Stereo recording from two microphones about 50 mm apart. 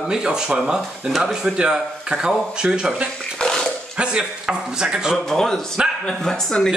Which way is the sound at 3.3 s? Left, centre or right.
Centre.